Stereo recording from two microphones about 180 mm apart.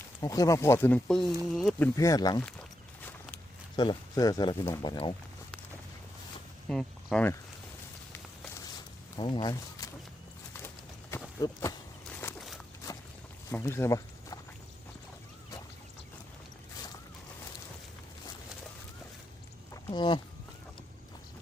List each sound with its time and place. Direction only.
0.2 s speech: 20° left (ahead or behind); by 1.9 s centre (ahead or behind)
2.0 s speech: 20° left (ahead or behind)
2.4 s speech: 5° left (ahead or behind)
3.8 s speech: 25° left (ahead or behind)
6.7 s speech: 5° left (ahead or behind)
9.1 s speech: 25° left (ahead or behind)
11.1 s horse: 20° left (ahead or behind)
13.5 s speech: 15° left (ahead or behind)
19.7 s speech: 25° left (ahead or behind)